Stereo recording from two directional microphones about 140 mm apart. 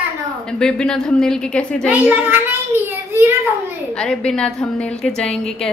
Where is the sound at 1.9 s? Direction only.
15° right (ahead or behind).